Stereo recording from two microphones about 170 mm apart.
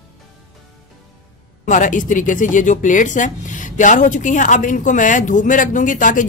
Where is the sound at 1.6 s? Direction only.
50° left (ahead or behind).